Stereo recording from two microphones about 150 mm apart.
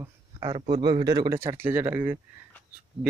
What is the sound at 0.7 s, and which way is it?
Speech, 30° right (ahead or behind).